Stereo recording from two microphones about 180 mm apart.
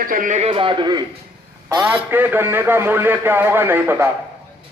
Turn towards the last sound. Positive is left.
turn(degrees=-10)  # may be behind; listen again after turning